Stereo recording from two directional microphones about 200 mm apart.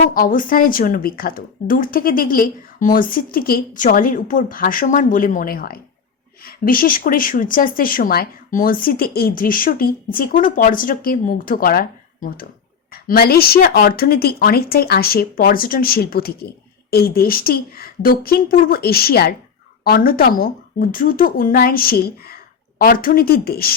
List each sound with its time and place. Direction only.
0.1 s speech: 45° left (ahead or behind)